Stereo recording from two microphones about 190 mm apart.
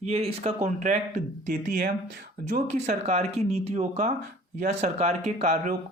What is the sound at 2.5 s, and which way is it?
Speech, 40° right (ahead or behind).